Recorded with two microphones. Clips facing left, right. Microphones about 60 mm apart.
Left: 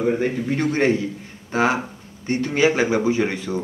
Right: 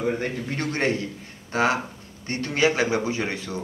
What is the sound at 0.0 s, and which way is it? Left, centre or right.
A woman's voice, centre.